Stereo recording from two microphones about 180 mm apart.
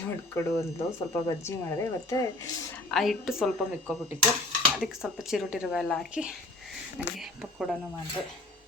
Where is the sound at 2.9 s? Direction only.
Centre (ahead or behind).